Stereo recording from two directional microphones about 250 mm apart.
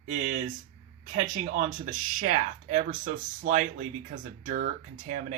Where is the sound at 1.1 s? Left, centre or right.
Right.